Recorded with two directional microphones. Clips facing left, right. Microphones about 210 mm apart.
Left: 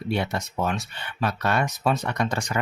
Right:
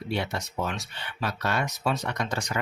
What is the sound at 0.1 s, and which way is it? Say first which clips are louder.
Speech: left 4 dB; 55° left (ahead or behind).